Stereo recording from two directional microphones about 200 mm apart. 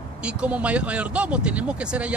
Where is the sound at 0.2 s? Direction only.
5° right (ahead or behind).